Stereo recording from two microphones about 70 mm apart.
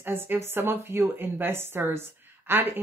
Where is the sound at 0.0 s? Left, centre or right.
Right.